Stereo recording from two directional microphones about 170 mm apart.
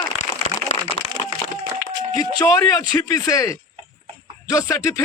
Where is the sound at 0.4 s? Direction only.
40° left (ahead or behind).